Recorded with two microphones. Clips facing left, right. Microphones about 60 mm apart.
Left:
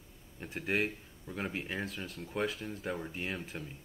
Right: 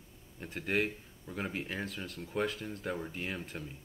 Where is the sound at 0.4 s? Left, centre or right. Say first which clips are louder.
Even; centre.